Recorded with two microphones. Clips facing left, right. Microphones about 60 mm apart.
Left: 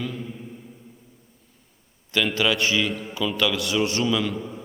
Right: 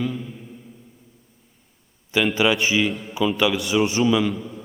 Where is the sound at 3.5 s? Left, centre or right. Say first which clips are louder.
Right 3 dB; centre.